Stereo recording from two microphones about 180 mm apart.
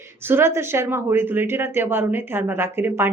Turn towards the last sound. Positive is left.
turn(degrees=-15)  # may be behind; listen again after turning